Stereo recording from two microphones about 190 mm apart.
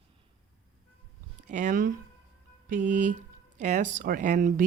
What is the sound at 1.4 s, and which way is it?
Speech, 40° right (ahead or behind).